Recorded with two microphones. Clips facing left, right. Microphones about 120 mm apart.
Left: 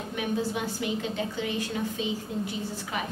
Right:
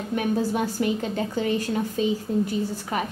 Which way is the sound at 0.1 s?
45° right (ahead or behind).